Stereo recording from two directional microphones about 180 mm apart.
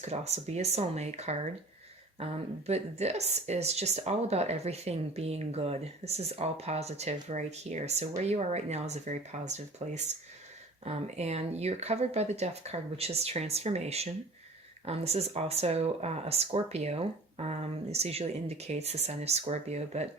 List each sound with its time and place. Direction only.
0.0 s speech: 35° right (ahead or behind)
2.6 s speech: 35° right (ahead or behind)